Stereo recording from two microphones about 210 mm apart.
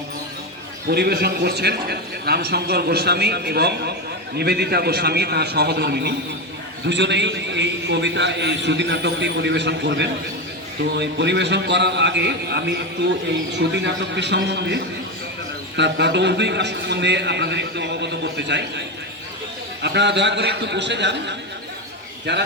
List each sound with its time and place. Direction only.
0.9 s a man's voice: 50° right (ahead or behind)
19.8 s a man's voice: 55° right (ahead or behind)